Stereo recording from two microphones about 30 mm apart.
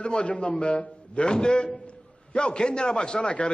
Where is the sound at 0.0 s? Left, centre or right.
Left.